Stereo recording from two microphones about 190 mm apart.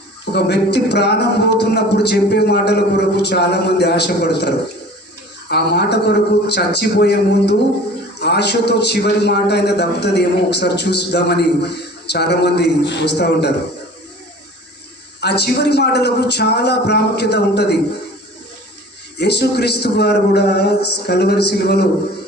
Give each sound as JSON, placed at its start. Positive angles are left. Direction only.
{"t": 0.3, "sound": "a man's voice", "side_deg": 60}
{"t": 15.2, "sound": "a man's voice", "side_deg": 60}
{"t": 19.1, "sound": "a man's voice", "side_deg": 60}